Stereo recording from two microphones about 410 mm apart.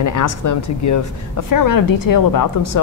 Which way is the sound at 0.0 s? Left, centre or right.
Left.